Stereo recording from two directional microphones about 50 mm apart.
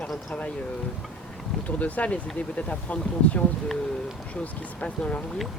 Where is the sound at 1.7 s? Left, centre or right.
Left.